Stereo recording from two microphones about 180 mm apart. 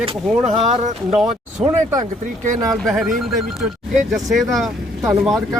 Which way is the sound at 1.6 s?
20° right (ahead or behind).